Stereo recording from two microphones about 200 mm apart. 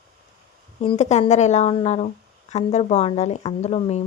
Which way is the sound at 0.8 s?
30° left (ahead or behind).